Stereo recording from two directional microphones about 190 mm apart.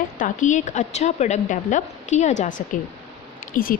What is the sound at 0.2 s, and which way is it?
A woman's voice, 40° left (ahead or behind).